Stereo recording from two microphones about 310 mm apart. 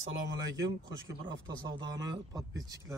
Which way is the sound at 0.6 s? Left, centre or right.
Centre.